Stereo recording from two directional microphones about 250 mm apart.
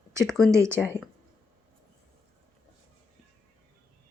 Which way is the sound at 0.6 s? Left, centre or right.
Centre.